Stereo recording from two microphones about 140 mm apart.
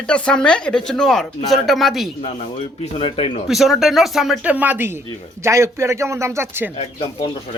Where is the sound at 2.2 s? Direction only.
50° left (ahead or behind).